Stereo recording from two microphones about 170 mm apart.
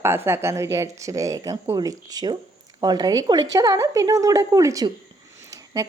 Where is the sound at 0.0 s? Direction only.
15° right (ahead or behind).